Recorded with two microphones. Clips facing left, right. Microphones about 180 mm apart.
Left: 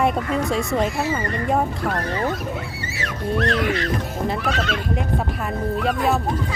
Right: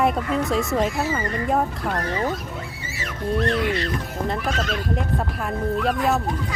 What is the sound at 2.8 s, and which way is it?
Speech, 75° left (ahead or behind).